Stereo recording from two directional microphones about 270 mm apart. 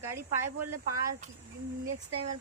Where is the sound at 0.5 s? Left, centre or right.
Right.